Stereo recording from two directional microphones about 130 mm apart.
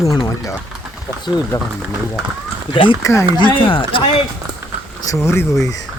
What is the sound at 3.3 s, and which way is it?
Speech, 40° left (ahead or behind).